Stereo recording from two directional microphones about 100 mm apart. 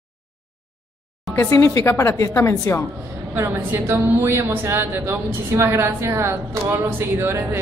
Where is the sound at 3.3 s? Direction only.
20° right (ahead or behind).